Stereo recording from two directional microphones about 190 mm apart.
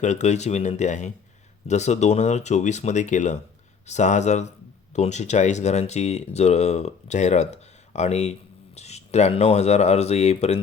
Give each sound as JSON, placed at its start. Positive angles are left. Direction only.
{"t": 0.0, "sound": "speech", "side_deg": 40}